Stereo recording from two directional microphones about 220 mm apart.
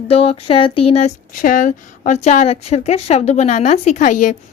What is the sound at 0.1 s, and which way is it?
Speech, 25° left (ahead or behind).